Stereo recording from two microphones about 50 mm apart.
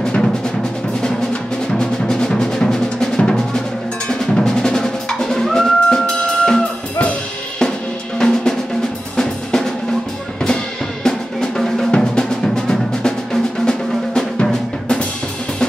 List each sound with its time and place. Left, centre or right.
0.0 s music: centre
8.2 s drum: centre
11.1 s drum: centre
11.9 s music: centre